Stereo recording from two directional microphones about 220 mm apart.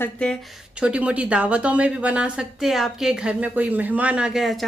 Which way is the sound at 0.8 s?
5° right (ahead or behind).